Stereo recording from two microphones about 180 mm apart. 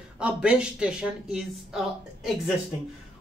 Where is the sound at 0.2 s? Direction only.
5° right (ahead or behind).